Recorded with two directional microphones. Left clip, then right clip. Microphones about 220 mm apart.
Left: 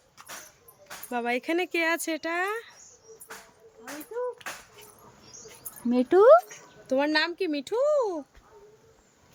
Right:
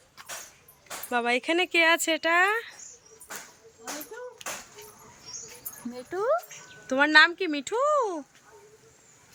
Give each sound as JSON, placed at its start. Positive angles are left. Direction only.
{"t": 1.1, "sound": "speech", "side_deg": 10}
{"t": 5.9, "sound": "speech", "side_deg": 40}
{"t": 6.8, "sound": "speech", "side_deg": 0}